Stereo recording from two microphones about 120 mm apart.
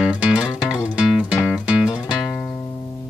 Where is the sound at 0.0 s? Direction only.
10° right (ahead or behind).